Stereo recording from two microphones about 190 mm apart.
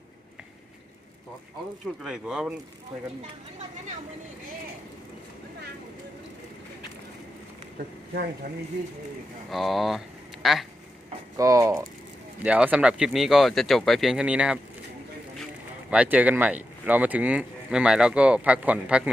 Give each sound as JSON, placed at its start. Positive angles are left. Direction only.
{"t": 2.0, "sound": "speech", "side_deg": -5}
{"t": 9.5, "sound": "speech", "side_deg": 0}
{"t": 11.3, "sound": "speech", "side_deg": -15}
{"t": 15.9, "sound": "speech", "side_deg": -5}